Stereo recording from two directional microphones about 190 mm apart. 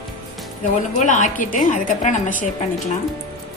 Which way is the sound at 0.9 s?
40° left (ahead or behind).